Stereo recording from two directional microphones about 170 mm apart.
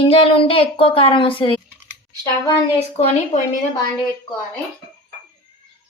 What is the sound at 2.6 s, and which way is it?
Speech, 35° left (ahead or behind).